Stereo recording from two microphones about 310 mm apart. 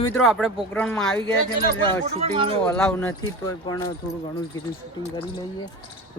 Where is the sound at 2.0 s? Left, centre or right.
Centre.